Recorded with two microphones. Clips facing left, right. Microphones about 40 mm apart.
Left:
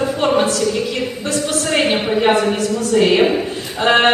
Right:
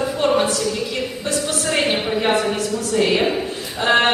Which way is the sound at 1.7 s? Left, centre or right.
Centre.